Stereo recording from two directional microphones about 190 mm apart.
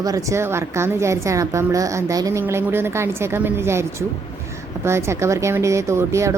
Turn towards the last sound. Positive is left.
turn(degrees=-15)  # may be behind; listen again after turning